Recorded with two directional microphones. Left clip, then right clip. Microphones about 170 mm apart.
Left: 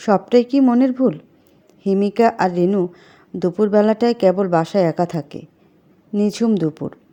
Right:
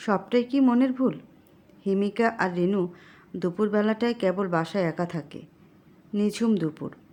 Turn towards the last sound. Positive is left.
turn(degrees=30)  # may be behind; listen again after turning